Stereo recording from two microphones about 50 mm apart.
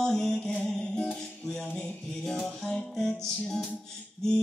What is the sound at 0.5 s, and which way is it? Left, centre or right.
Music, left.